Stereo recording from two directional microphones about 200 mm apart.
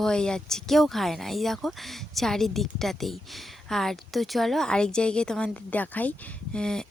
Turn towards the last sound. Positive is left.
turn(degrees=5)  # may be behind; listen again after turning